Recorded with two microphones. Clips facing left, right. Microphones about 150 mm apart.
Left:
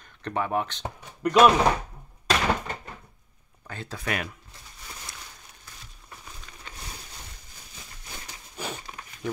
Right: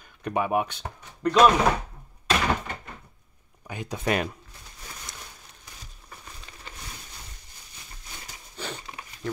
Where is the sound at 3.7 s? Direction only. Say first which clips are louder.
Right 3 dB; 15° right (ahead or behind).